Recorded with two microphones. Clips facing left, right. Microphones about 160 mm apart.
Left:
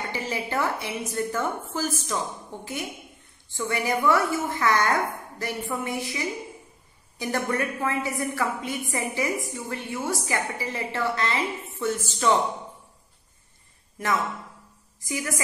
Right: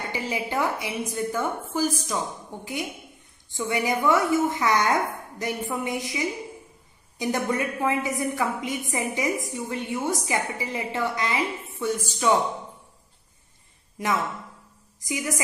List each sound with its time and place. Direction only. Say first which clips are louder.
0.1 s a woman's voice: right 2 dB; 15° right (ahead or behind)
15.0 s a woman's voice: right 2 dB; 15° right (ahead or behind)